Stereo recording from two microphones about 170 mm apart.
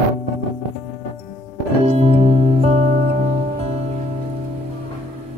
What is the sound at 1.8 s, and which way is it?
Music, 35° right (ahead or behind).